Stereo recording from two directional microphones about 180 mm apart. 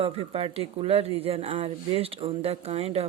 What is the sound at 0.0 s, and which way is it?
Speech, 35° right (ahead or behind).